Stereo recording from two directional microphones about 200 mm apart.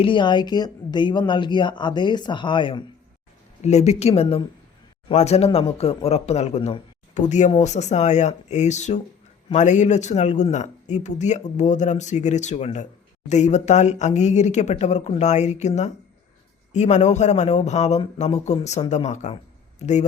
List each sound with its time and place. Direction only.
0.0 s speech: 25° left (ahead or behind)
3.6 s speech: 35° left (ahead or behind)